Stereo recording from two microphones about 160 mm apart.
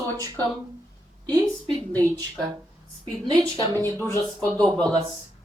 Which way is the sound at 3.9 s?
10° left (ahead or behind).